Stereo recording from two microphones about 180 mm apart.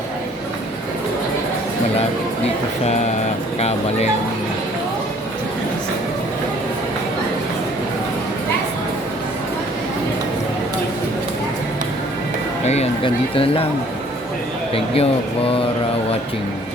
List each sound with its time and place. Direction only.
2.8 s speech: 40° left (ahead or behind)
12.6 s speech: 35° left (ahead or behind)
14.7 s speech: 30° left (ahead or behind)